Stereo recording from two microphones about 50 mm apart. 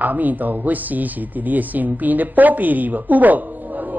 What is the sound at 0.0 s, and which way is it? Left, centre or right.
A man's voice, right.